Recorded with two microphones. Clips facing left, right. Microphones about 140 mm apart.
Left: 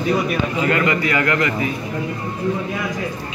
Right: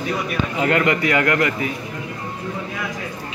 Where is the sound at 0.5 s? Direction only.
60° right (ahead or behind).